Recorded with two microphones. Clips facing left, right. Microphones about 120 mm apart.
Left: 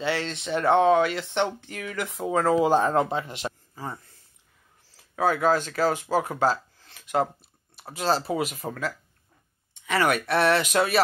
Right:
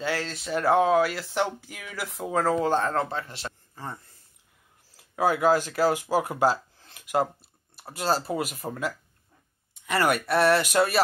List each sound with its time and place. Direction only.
0.0 s speech: centre (ahead or behind)
2.6 s speech: 15° left (ahead or behind)
3.7 s speech: 5° left (ahead or behind)
4.9 s speech: 5° right (ahead or behind)